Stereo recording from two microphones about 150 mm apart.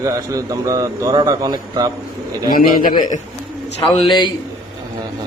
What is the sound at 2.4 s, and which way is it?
Speech, 70° left (ahead or behind).